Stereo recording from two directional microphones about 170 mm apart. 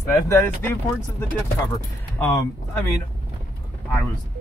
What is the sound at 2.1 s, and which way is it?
Speech, 10° left (ahead or behind).